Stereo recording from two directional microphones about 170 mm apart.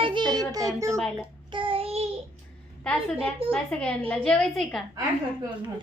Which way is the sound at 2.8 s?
5° left (ahead or behind).